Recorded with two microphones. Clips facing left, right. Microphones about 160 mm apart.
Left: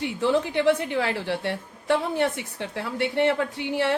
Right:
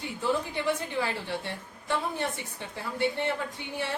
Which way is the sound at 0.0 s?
75° left (ahead or behind).